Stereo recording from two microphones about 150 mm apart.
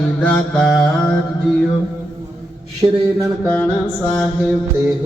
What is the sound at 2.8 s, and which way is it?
Speech, 25° right (ahead or behind).